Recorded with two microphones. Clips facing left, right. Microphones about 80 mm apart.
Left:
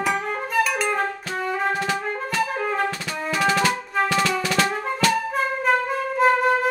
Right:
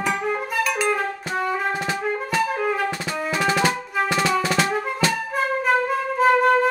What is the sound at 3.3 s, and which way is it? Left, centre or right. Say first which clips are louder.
Music: left 1 dB; centre.